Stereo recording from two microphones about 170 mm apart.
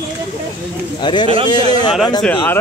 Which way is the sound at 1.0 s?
25° left (ahead or behind).